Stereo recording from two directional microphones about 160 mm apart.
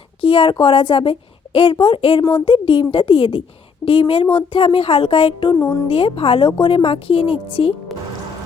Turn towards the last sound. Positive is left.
turn(degrees=35)  # may be behind; listen again after turning